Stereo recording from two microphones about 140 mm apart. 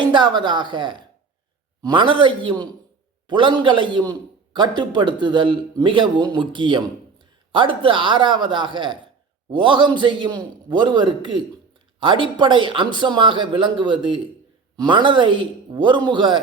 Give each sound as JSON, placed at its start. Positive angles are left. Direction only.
{"t": 0.0, "sound": "a man's voice", "side_deg": -35}